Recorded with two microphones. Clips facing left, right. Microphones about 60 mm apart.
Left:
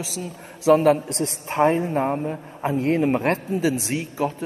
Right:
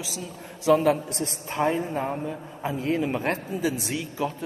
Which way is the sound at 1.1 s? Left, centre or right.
Left.